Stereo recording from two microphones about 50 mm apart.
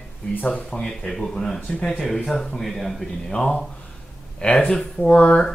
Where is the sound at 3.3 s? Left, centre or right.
Centre.